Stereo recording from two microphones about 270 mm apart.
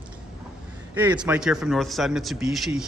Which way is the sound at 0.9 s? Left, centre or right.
Centre.